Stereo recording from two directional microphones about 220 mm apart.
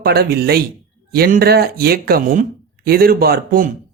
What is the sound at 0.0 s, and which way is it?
Speech, 45° right (ahead or behind).